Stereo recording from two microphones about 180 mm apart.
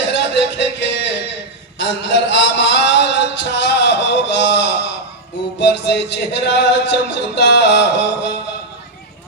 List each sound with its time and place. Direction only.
0.1 s music: 75° left (ahead or behind)
1.8 s a sound: 75° left (ahead or behind)
5.5 s music: 75° left (ahead or behind)